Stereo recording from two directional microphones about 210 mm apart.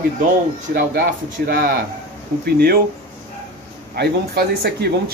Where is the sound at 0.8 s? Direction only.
45° right (ahead or behind).